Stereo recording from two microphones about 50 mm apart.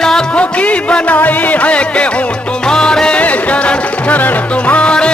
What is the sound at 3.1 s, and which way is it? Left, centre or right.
Music, left.